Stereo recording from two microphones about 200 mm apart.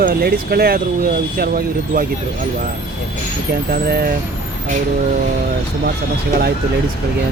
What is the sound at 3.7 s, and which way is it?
Speech, 50° right (ahead or behind).